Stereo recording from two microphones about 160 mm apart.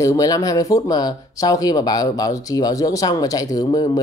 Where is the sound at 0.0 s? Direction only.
20° left (ahead or behind).